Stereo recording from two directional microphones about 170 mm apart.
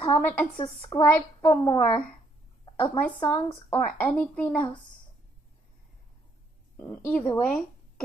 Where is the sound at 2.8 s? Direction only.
10° left (ahead or behind).